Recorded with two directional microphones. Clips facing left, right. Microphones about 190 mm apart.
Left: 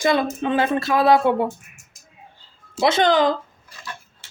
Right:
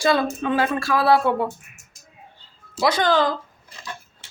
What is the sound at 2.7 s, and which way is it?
Speech, 25° left (ahead or behind).